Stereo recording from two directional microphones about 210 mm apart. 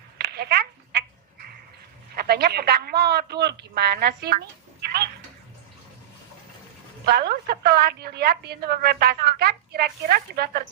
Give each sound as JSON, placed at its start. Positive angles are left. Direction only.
{"t": 0.2, "sound": "a sound", "side_deg": -50}
{"t": 2.1, "sound": "a man's voice", "side_deg": -50}
{"t": 7.0, "sound": "a woman's voice", "side_deg": -50}